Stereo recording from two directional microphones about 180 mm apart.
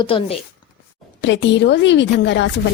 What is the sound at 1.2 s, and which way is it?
A woman's voice, 90° left.